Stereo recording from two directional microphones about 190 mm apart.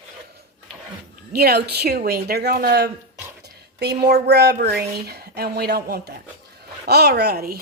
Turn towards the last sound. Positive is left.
turn(degrees=-55)  # may be behind; listen again after turning